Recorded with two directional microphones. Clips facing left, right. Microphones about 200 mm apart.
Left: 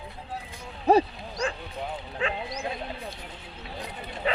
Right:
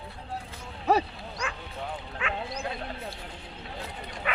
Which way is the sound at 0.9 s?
35° left (ahead or behind).